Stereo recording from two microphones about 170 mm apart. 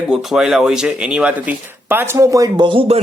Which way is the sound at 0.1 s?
5° right (ahead or behind).